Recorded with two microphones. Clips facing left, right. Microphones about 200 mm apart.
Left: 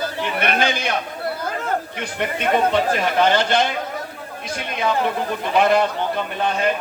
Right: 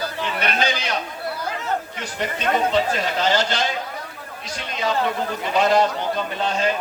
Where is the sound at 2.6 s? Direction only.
55° left (ahead or behind).